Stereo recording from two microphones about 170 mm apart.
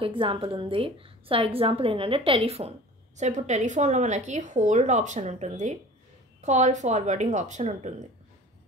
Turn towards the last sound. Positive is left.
turn(degrees=-45)  # may be behind; listen again after turning